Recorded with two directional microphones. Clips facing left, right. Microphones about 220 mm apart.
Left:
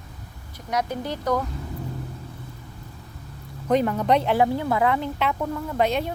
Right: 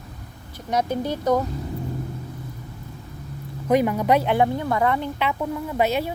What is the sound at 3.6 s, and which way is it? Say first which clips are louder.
Speech: right 2 dB; 10° right (ahead or behind).